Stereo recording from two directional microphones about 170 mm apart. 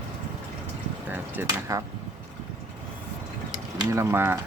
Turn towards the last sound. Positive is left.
turn(degrees=-15)  # may be behind; listen again after turning